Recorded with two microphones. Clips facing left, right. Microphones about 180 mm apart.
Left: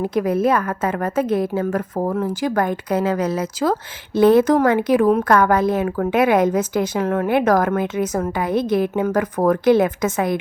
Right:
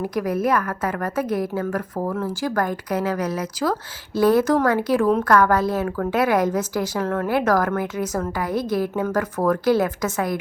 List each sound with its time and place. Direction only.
0.0 s a woman's voice: 25° left (ahead or behind)